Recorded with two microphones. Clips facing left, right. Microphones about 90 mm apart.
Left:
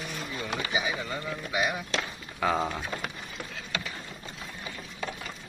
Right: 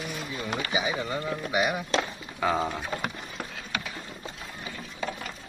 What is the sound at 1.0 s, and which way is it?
Speech, 20° right (ahead or behind).